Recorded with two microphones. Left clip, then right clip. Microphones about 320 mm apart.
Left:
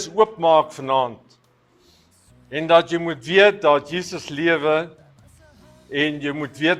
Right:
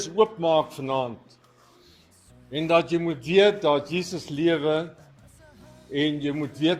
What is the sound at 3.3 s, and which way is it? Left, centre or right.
A man's voice, left.